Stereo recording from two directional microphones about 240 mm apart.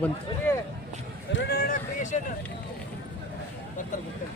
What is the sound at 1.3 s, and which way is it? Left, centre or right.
Speech, left.